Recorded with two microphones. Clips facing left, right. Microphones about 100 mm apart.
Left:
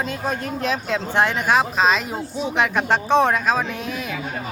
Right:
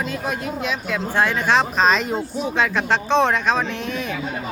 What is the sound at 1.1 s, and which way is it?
Speech, 20° left (ahead or behind).